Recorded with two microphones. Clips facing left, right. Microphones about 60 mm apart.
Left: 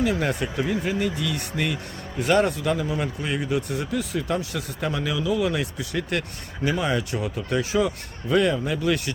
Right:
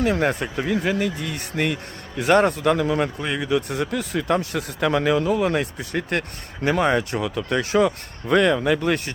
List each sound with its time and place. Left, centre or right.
0.0 s speech: right
1.2 s speech: right